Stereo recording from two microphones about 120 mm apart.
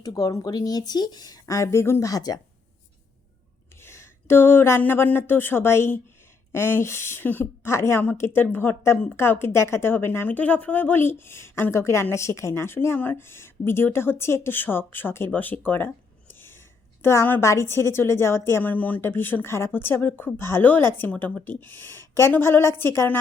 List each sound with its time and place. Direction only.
0.0 s speech: 30° left (ahead or behind)
3.8 s a woman's voice: 20° left (ahead or behind)
16.3 s whispering: 20° left (ahead or behind)
17.0 s a woman's voice: 20° left (ahead or behind)